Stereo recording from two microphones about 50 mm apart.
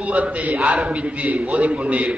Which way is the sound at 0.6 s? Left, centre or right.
Centre.